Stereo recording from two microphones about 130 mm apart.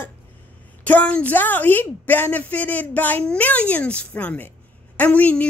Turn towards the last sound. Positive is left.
turn(degrees=10)  # may be behind; listen again after turning